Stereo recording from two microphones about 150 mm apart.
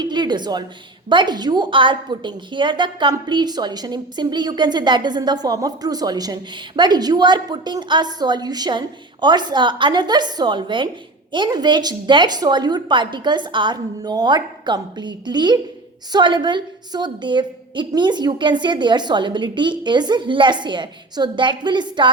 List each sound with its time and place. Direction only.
0.0 s a woman's voice: 30° right (ahead or behind)